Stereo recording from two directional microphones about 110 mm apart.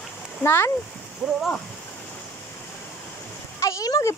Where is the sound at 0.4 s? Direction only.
20° left (ahead or behind).